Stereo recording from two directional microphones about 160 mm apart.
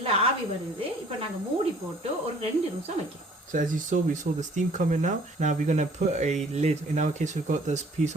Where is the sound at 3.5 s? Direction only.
50° right (ahead or behind).